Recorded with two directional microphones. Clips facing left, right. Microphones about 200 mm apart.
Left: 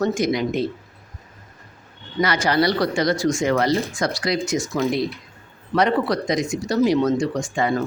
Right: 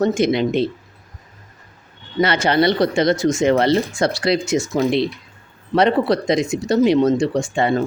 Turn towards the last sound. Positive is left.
turn(degrees=-30)  # may be behind; listen again after turning